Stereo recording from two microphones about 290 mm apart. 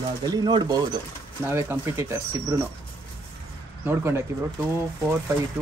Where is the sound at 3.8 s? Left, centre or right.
Centre.